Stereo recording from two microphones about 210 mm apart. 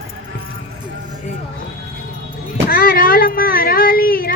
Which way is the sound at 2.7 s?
45° left (ahead or behind).